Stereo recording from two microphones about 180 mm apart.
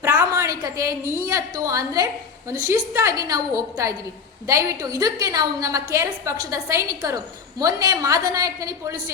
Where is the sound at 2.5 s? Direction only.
15° right (ahead or behind).